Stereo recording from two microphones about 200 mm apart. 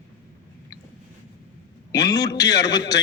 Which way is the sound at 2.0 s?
20° left (ahead or behind).